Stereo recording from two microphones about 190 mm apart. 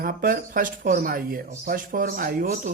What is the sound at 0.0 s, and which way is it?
Speech, 50° right (ahead or behind).